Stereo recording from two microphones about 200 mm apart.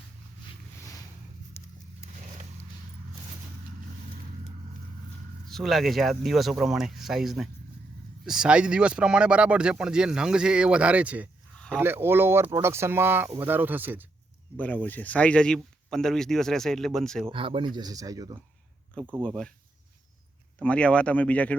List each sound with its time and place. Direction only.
1.6 s horse: 10° left (ahead or behind)
5.5 s speech: centre (ahead or behind)
11.5 s a sound: 5° left (ahead or behind)
11.8 s speech: 10° right (ahead or behind)
14.6 s speech: 5° left (ahead or behind)
17.3 s speech: 25° right (ahead or behind)
19.0 s speech: 5° left (ahead or behind)
20.6 s speech: 5° left (ahead or behind)